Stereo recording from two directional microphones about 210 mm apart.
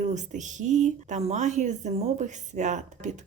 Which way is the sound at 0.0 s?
35° right (ahead or behind).